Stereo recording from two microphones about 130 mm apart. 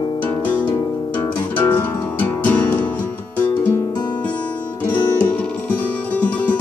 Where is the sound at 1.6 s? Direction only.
15° left (ahead or behind).